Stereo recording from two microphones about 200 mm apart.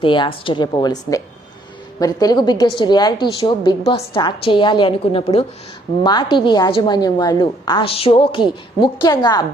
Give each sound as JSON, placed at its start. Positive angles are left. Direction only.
{"t": 0.0, "sound": "a woman's voice", "side_deg": 25}